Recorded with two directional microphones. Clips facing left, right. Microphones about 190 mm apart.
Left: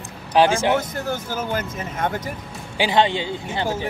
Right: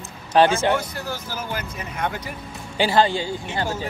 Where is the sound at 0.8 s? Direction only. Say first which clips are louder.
Left 4 dB; 50° left (ahead or behind).